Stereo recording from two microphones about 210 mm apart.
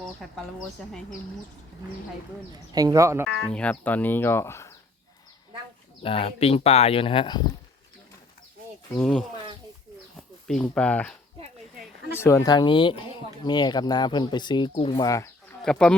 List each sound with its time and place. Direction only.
0.0 s speech: centre (ahead or behind)
2.5 s speech: 15° right (ahead or behind)
3.2 s speech: 5° left (ahead or behind)
6.0 s speech: 25° left (ahead or behind)
9.0 s speech: 5° left (ahead or behind)
12.1 s speech: 15° left (ahead or behind)
15.6 s speech: 5° left (ahead or behind)